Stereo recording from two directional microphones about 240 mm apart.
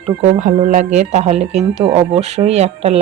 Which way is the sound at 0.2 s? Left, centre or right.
Right.